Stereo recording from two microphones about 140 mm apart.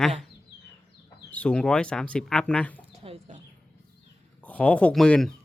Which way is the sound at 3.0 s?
45° right (ahead or behind).